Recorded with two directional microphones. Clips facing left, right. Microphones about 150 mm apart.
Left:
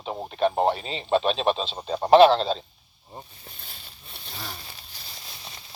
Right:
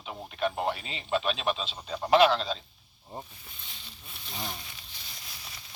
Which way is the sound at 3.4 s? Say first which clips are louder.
Left 3 dB; 45° left (ahead or behind).